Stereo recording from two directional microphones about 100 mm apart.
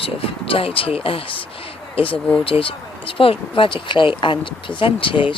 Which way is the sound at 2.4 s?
65° left (ahead or behind).